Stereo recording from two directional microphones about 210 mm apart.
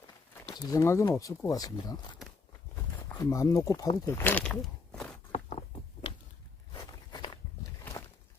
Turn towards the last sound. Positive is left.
turn(degrees=20)  # may be behind; listen again after turning